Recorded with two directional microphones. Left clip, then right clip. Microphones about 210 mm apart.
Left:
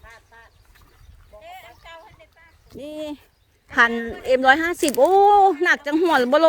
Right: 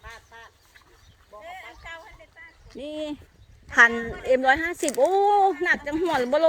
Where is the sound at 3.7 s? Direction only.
20° left (ahead or behind).